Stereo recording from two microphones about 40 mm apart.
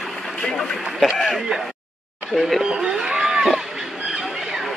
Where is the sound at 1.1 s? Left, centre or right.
Centre.